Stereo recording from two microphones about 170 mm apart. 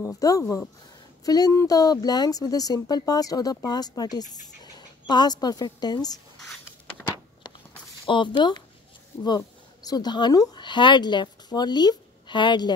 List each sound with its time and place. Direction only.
0.0 s speech: 20° left (ahead or behind)
8.1 s speech: 30° left (ahead or behind)
9.8 s speech: 25° left (ahead or behind)